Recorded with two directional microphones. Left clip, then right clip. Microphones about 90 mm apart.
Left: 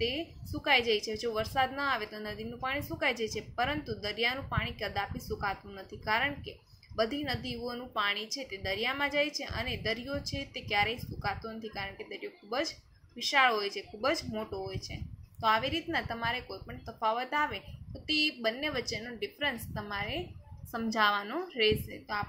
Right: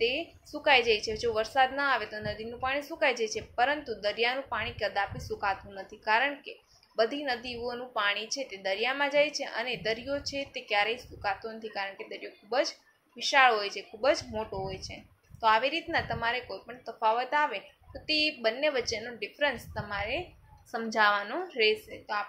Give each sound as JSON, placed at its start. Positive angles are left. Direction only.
{"t": 0.0, "sound": "a woman's voice", "side_deg": 30}